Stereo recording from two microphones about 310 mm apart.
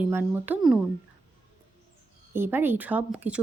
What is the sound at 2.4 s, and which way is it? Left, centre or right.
Speech, centre.